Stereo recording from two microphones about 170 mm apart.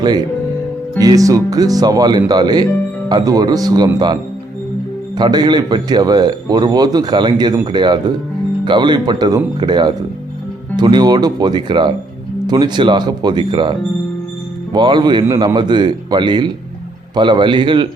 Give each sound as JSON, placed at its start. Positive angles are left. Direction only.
{"t": 0.0, "sound": "speech", "side_deg": -25}